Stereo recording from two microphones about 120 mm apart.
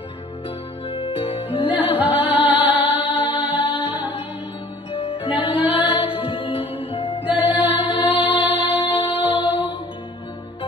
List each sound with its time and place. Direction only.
0.8 s music: 50° left (ahead or behind)
1.8 s music: 15° right (ahead or behind)
5.6 s music: 15° right (ahead or behind)
6.0 s music: 50° left (ahead or behind)
7.2 s music: 15° right (ahead or behind)